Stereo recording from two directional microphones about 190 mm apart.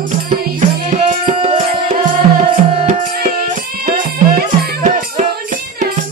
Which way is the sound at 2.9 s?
50° right (ahead or behind).